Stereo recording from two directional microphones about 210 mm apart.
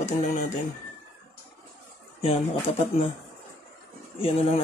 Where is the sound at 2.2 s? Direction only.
30° left (ahead or behind).